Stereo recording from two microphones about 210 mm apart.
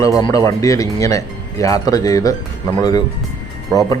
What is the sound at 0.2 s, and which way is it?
Speech, 20° left (ahead or behind).